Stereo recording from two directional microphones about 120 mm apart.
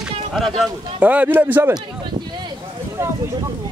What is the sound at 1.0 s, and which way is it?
Speech, 15° right (ahead or behind).